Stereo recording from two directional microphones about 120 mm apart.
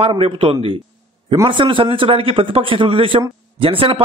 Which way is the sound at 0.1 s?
45° right (ahead or behind).